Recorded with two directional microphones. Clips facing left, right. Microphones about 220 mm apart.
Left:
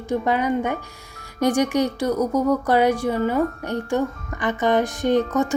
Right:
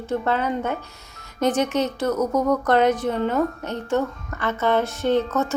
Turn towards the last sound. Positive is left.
turn(degrees=15)  # may be behind; listen again after turning